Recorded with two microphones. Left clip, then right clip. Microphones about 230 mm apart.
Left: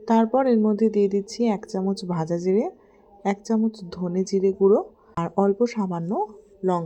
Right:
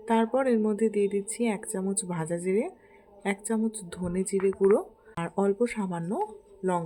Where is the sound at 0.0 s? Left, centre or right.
Centre.